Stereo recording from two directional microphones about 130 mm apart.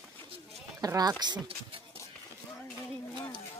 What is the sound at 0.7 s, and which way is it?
Speech, 30° right (ahead or behind).